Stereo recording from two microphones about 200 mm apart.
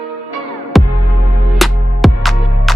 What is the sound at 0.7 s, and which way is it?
Music, centre (ahead or behind).